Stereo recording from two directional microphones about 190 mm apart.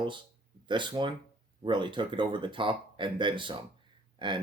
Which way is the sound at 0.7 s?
25° right (ahead or behind).